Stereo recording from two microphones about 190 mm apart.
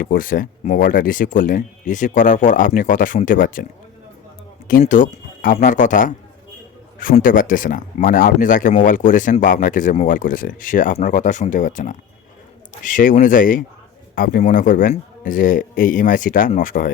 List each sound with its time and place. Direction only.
0.0 s speech: 45° left (ahead or behind)
4.7 s speech: 45° left (ahead or behind)